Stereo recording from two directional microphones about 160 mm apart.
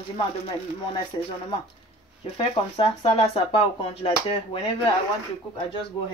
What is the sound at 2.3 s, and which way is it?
Speech, 35° left (ahead or behind).